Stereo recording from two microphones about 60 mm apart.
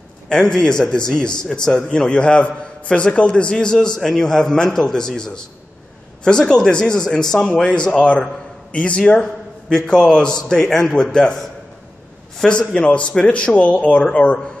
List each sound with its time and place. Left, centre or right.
0.3 s a man's voice: centre
12.4 s speech: centre